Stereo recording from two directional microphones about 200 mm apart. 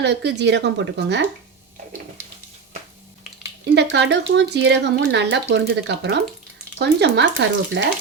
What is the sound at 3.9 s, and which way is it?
Speech, 60° right (ahead or behind).